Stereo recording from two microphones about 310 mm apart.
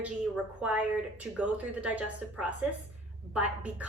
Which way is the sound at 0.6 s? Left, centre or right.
Centre.